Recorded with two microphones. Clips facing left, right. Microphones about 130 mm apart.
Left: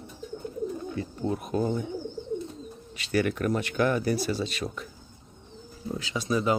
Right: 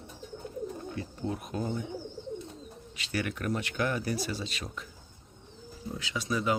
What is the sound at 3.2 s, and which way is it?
Speech, 45° left (ahead or behind).